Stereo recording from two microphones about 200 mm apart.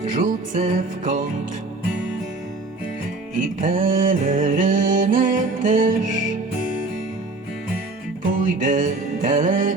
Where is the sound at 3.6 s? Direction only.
40° right (ahead or behind).